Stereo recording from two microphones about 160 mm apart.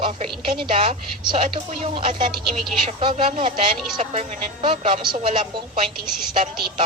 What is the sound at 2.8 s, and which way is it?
A woman's voice, 30° right (ahead or behind).